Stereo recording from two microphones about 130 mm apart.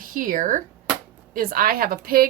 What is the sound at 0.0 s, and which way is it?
A woman's voice, 90° right.